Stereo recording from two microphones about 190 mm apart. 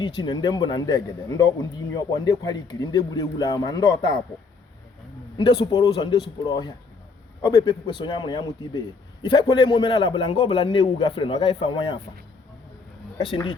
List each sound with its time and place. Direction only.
0.0 s a man's voice: 25° left (ahead or behind)
5.4 s a man's voice: 25° left (ahead or behind)
13.1 s a man's voice: 25° left (ahead or behind)